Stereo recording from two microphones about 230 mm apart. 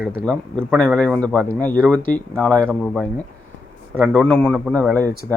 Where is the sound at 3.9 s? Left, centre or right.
Centre.